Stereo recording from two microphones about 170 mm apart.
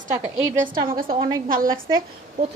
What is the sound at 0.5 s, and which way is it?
Speech, 50° right (ahead or behind).